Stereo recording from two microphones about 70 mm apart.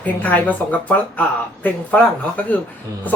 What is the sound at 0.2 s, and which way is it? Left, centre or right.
Speech, left.